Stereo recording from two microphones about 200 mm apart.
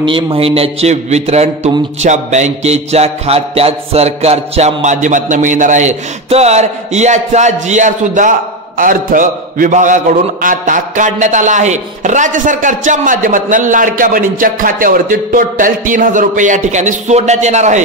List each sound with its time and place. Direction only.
0.0 s a man's voice: 25° right (ahead or behind)